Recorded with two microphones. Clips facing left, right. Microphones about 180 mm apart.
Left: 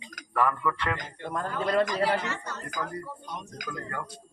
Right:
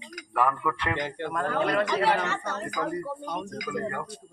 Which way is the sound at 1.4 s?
75° right (ahead or behind).